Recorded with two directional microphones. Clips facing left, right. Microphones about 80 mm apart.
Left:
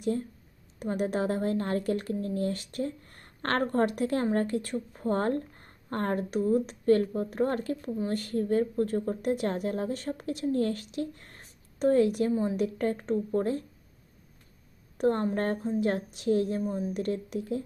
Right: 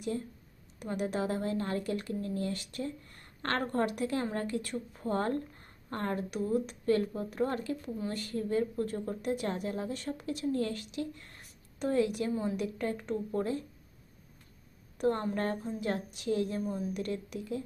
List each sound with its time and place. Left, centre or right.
0.0 s a woman's voice: left
14.9 s speech: left